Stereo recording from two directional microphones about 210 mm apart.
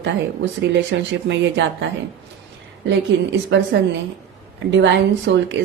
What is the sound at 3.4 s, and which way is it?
A woman's voice, 60° right (ahead or behind).